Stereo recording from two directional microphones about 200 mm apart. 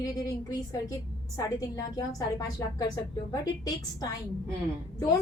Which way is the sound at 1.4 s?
20° left (ahead or behind).